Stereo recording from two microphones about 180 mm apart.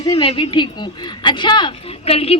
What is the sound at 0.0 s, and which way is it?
A woman's voice, 20° left (ahead or behind).